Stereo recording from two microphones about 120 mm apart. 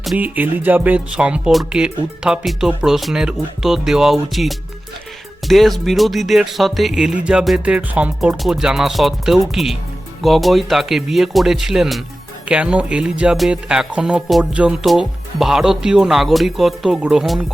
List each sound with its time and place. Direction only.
0.2 s speech: 15° right (ahead or behind)